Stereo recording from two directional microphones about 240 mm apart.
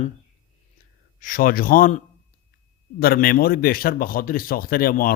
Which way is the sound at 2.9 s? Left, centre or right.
Left.